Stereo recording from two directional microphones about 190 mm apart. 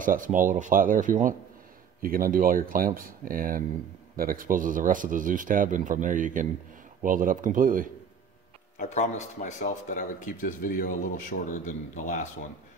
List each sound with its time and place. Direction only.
0.0 s speech: 45° right (ahead or behind)
8.7 s speech: 40° left (ahead or behind)